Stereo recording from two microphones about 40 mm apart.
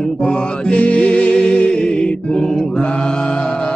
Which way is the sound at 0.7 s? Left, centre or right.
Left.